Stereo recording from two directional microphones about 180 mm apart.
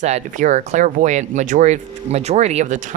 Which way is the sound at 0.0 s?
40° right (ahead or behind).